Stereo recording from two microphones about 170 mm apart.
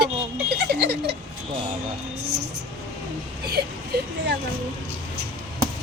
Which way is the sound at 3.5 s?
70° right (ahead or behind).